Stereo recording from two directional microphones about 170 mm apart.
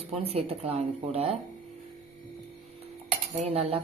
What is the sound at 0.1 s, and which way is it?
A woman's voice, 35° right (ahead or behind).